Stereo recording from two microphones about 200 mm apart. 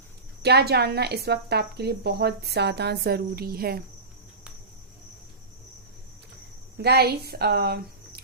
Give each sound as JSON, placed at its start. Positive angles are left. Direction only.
{"t": 0.4, "sound": "a woman's voice", "side_deg": -55}
{"t": 6.7, "sound": "a woman's voice", "side_deg": -55}